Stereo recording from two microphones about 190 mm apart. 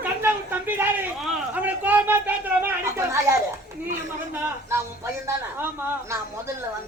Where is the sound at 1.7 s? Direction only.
10° right (ahead or behind).